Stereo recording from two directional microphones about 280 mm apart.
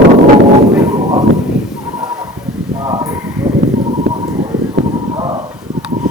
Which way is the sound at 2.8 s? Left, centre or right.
Centre.